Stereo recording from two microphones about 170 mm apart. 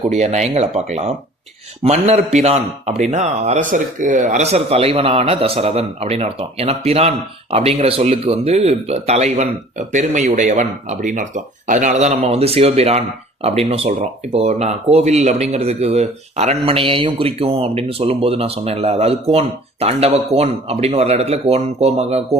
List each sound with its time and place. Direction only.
0.0 s speech: 40° right (ahead or behind)